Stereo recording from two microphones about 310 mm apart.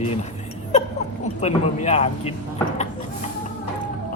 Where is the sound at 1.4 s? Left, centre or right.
Left.